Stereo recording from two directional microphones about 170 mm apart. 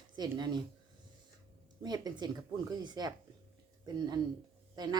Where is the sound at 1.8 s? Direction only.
25° right (ahead or behind).